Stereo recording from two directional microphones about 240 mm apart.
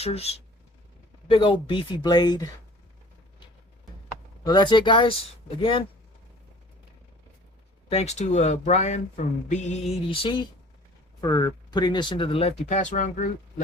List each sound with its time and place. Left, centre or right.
0.0 s speech: left
4.4 s speech: centre
7.9 s speech: left